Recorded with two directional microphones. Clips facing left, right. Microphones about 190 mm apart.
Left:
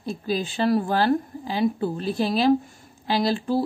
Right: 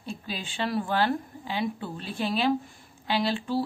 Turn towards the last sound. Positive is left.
turn(degrees=40)  # may be behind; listen again after turning